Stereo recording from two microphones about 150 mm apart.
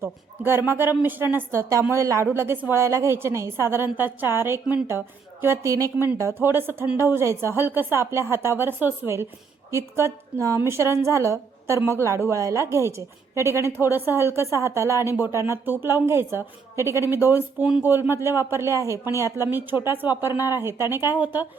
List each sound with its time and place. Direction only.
0.0 s a woman's voice: 15° right (ahead or behind)